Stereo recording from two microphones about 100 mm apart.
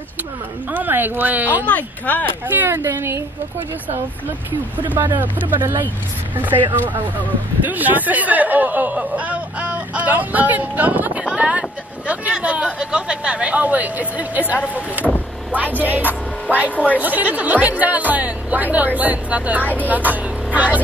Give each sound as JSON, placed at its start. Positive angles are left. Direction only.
{"t": 0.7, "sound": "speech", "side_deg": -20}
{"t": 1.7, "sound": "speech", "side_deg": 15}
{"t": 2.4, "sound": "speech", "side_deg": -20}
{"t": 4.5, "sound": "speech", "side_deg": -20}